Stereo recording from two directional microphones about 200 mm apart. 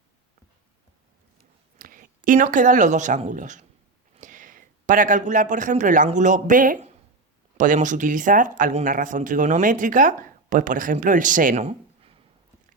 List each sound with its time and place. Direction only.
1.8 s a man's voice: 45° right (ahead or behind)